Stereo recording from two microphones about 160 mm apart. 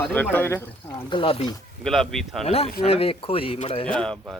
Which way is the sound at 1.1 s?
35° left (ahead or behind).